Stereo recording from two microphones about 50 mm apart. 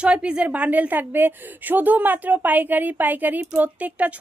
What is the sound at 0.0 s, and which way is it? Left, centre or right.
A woman's voice, right.